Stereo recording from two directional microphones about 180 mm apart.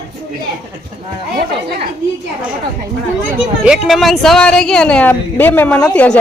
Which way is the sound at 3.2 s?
5° right (ahead or behind).